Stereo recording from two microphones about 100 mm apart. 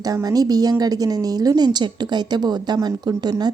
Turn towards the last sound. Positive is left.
turn(degrees=-45)  # may be behind; listen again after turning